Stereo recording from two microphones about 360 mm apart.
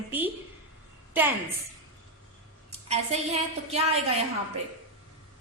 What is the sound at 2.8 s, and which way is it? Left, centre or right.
A woman's voice, centre.